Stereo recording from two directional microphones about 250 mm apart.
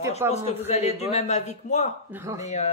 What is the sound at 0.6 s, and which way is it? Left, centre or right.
A woman's voice, left.